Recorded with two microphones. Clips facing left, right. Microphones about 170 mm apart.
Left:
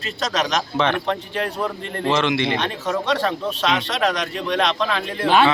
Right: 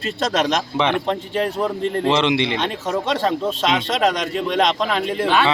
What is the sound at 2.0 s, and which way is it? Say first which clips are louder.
Speech: even; 20° right (ahead or behind).